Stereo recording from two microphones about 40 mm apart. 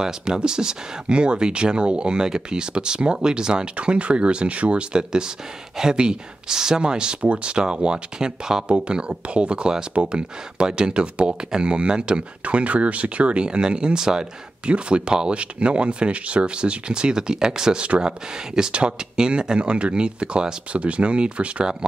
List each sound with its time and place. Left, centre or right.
0.0 s speech: centre
3.7 s speech: right
4.9 s speech: centre
14.7 s speech: right
17.8 s speech: right